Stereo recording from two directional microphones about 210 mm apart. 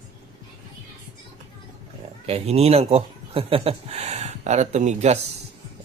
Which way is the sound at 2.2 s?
30° right (ahead or behind).